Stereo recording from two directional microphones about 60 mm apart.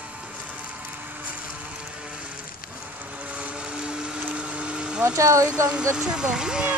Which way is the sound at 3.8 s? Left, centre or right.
Centre.